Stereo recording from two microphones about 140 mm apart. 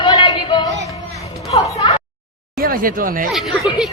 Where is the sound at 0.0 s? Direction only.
30° left (ahead or behind).